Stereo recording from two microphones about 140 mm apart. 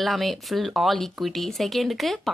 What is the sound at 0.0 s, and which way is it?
A woman's voice, centre (ahead or behind).